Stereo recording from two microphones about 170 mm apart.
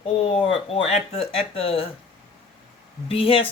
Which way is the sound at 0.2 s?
35° left (ahead or behind).